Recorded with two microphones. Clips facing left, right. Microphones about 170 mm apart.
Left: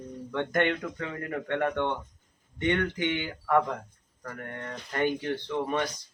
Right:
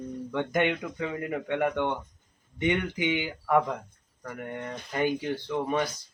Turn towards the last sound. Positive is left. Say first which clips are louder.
# right 1 dB
turn(degrees=-5)  # may be behind; listen again after turning